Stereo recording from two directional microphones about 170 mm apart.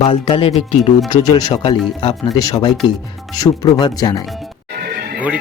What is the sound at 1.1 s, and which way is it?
Speech, 25° left (ahead or behind).